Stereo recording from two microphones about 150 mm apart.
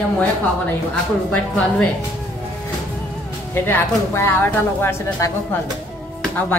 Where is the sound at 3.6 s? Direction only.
15° left (ahead or behind).